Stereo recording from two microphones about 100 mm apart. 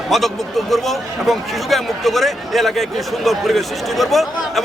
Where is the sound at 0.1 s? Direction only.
Centre (ahead or behind).